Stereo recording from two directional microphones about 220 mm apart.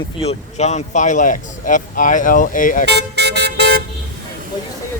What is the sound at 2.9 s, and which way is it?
Vehicle, 50° right (ahead or behind).